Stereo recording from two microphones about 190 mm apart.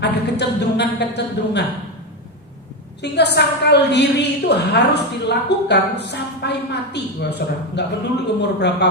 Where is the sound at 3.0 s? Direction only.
60° left (ahead or behind).